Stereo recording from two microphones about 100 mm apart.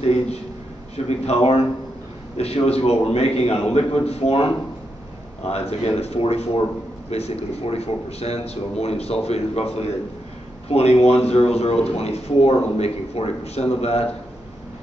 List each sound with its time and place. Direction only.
0.9 s a man's voice: 90° left
5.5 s a man's voice: 90° left